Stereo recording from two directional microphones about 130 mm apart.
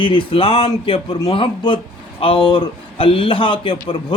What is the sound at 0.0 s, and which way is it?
A man's voice, 40° left (ahead or behind).